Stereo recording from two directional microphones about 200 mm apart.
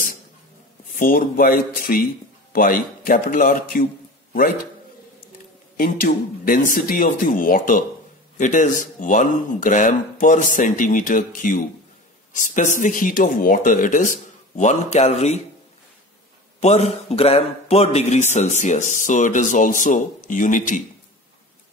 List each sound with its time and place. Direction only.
0.9 s speech: 45° left (ahead or behind)
5.8 s a man's voice: 45° left (ahead or behind)
16.5 s a man's voice: 35° left (ahead or behind)